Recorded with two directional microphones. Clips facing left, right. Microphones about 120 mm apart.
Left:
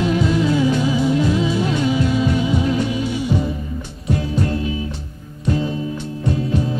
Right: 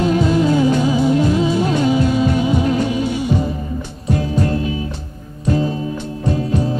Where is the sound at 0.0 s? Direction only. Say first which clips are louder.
Right 3 dB; 40° right (ahead or behind).